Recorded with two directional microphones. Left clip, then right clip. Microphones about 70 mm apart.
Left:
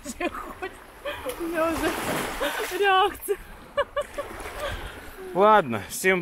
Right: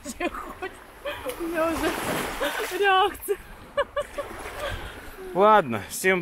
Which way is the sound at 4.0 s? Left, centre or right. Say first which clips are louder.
Even; left.